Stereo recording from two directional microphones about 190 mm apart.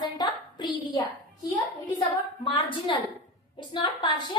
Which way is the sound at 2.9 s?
25° left (ahead or behind).